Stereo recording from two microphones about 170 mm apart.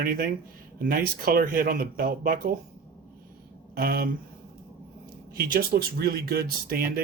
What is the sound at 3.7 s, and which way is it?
Speech, 65° right (ahead or behind).